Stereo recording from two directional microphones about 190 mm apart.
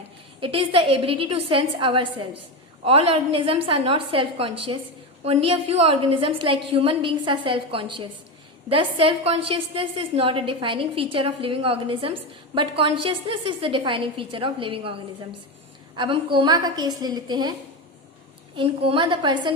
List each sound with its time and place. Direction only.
0.3 s a woman's voice: 25° right (ahead or behind)
16.0 s a woman's voice: 25° right (ahead or behind)
18.5 s a woman's voice: 30° right (ahead or behind)